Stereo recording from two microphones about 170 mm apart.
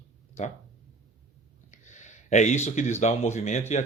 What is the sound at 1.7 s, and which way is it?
Speech, 45° left (ahead or behind).